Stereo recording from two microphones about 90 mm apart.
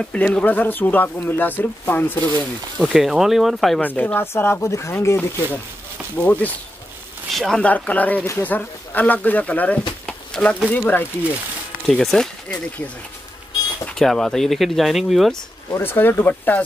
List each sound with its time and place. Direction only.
0.0 s speech: 15° left (ahead or behind)
2.8 s speech: 5° right (ahead or behind)
3.8 s speech: 20° left (ahead or behind)
6.1 s speech: 20° left (ahead or behind)
7.2 s speech: centre (ahead or behind)
7.6 s speech: 15° left (ahead or behind)
10.0 s a sound: 10° left (ahead or behind)
10.7 s speech: 20° left (ahead or behind)
11.9 s speech: 5° left (ahead or behind)
15.8 s speech: 25° left (ahead or behind)